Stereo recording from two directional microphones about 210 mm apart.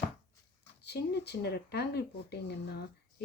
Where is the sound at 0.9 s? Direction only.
50° left (ahead or behind).